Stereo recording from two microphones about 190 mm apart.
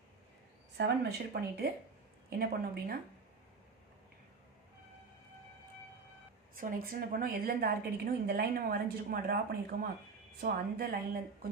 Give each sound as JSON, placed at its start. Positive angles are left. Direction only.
{"t": 0.8, "sound": "a woman's voice", "side_deg": -55}
{"t": 6.6, "sound": "a woman's voice", "side_deg": -45}